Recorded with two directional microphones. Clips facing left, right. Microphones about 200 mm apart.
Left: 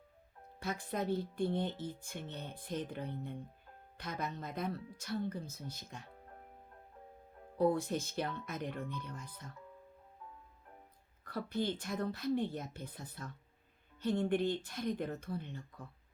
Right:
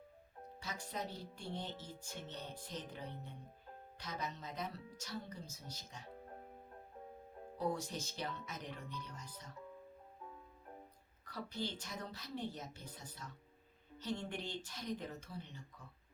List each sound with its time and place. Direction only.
0.6 s speech: 55° left (ahead or behind)
7.6 s speech: 55° left (ahead or behind)
11.3 s speech: 55° left (ahead or behind)